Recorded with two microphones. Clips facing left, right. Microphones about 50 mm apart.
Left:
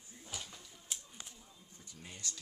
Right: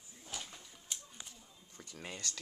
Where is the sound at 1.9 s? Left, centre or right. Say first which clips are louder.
Right 4 dB; right.